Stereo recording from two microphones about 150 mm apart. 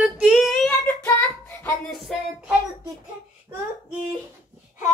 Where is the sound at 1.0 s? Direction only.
15° left (ahead or behind).